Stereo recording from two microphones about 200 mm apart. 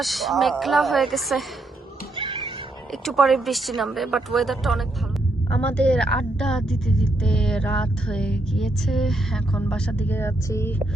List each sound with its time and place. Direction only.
0.0 s a woman's voice: centre (ahead or behind)
2.1 s a sound: 25° right (ahead or behind)
3.0 s a woman's voice: centre (ahead or behind)